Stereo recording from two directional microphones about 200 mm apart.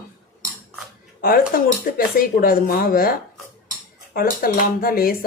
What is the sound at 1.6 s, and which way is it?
Speech, 45° left (ahead or behind).